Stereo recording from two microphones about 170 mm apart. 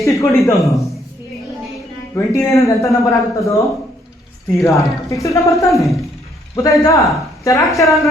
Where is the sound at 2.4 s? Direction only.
15° left (ahead or behind).